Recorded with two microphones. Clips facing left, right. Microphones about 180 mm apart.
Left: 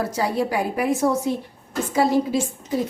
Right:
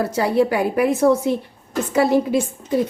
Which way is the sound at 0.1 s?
60° right (ahead or behind).